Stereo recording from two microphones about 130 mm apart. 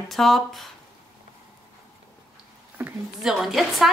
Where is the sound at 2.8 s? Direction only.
20° right (ahead or behind).